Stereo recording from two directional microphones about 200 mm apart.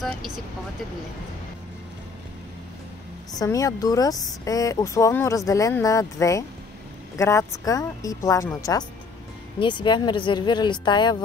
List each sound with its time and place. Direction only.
0.0 s speech: centre (ahead or behind)
3.3 s speech: 15° left (ahead or behind)